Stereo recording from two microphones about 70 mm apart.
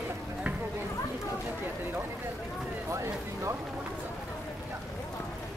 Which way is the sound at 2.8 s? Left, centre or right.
Right.